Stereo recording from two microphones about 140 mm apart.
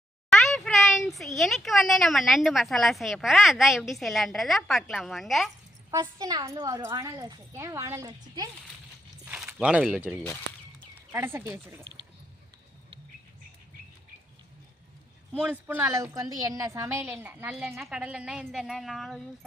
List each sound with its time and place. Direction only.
0.3 s speech: centre (ahead or behind)
5.9 s a woman's voice: 25° right (ahead or behind)
9.2 s speech: 10° right (ahead or behind)
15.4 s a woman's voice: 10° right (ahead or behind)